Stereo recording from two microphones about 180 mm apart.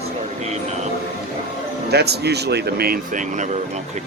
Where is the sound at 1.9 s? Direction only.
65° right (ahead or behind).